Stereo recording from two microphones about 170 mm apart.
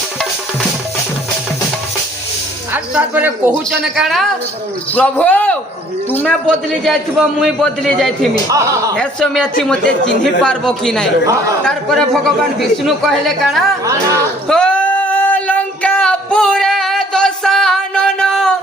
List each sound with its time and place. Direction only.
2.7 s speech: 10° right (ahead or behind)
4.9 s a man's voice: 10° left (ahead or behind)
8.4 s speech: 15° right (ahead or behind)
9.0 s a man's voice: 5° left (ahead or behind)
14.4 s a sound: 5° left (ahead or behind)